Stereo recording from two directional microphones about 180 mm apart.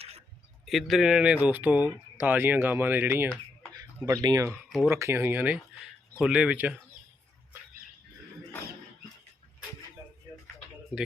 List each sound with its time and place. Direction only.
0.6 s speech: centre (ahead or behind)